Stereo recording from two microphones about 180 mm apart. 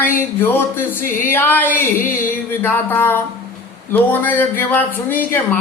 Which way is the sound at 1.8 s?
50° left (ahead or behind).